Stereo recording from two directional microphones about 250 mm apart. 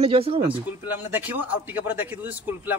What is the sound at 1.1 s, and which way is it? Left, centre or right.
Speech, centre.